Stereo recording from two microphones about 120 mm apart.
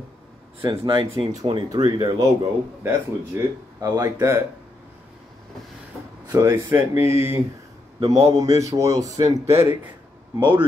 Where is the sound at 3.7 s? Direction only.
30° right (ahead or behind).